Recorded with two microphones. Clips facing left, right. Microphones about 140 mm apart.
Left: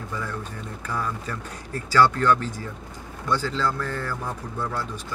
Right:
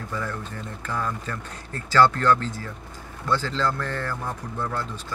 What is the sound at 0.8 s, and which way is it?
Speech, 10° left (ahead or behind).